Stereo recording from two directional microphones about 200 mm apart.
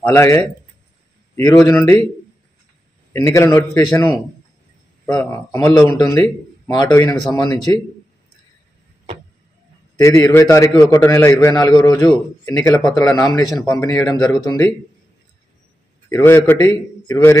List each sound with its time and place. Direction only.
0.0 s a man's voice: 15° left (ahead or behind)
3.1 s a man's voice: 10° left (ahead or behind)
9.9 s a man's voice: 15° left (ahead or behind)
16.1 s a man's voice: 15° left (ahead or behind)